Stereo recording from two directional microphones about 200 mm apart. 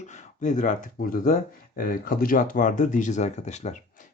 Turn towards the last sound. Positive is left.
turn(degrees=35)  # may be behind; listen again after turning